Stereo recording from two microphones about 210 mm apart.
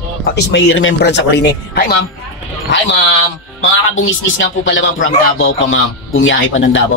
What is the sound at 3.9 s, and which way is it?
Speech, 65° left (ahead or behind).